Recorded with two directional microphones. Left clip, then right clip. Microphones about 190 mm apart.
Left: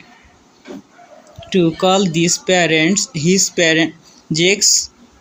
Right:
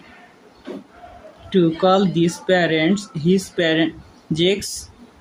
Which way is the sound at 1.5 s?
35° left (ahead or behind).